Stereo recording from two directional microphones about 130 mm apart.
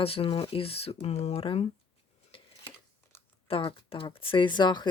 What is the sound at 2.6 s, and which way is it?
Crumpling, 20° left (ahead or behind).